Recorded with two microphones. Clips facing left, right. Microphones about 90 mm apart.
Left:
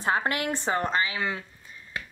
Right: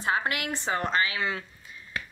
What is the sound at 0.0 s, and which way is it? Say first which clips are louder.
Speech: left 2 dB; 35° left (ahead or behind).